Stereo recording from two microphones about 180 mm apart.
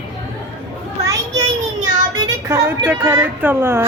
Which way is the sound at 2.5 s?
15° right (ahead or behind).